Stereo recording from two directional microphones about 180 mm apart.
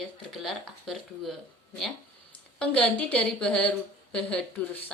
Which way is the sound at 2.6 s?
5° left (ahead or behind).